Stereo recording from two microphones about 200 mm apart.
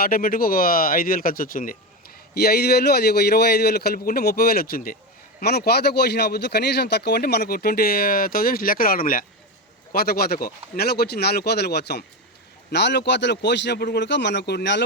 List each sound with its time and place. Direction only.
0.0 s a man's voice: 45° left (ahead or behind)